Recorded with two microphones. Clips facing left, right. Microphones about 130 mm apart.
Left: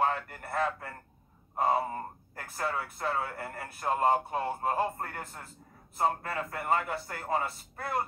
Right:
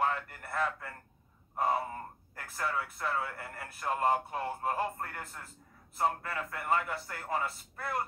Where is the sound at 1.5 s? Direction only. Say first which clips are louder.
Left 3 dB; 25° left (ahead or behind).